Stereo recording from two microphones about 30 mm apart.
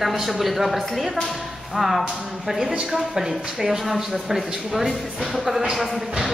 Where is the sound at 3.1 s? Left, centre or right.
Centre.